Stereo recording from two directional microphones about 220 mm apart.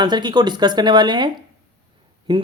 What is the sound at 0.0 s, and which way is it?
Speech, 20° right (ahead or behind).